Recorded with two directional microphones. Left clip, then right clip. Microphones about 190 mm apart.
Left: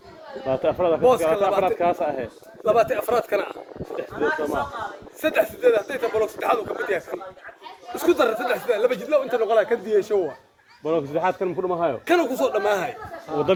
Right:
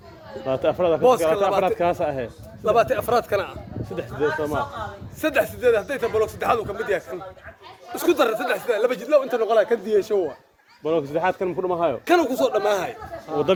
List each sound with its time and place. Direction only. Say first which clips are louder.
0.4 s a man's voice: even; 20° right (ahead or behind)
5.2 s a man's voice: left 1 dB; 20° right (ahead or behind)
10.8 s a man's voice: right 1 dB; 20° right (ahead or behind)
12.1 s speech: right 2 dB; 30° right (ahead or behind)
13.3 s speech: right 1 dB; 45° right (ahead or behind)